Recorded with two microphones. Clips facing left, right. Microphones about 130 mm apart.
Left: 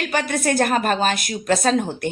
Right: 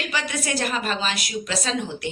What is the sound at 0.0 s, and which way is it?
A woman's voice, 50° left (ahead or behind).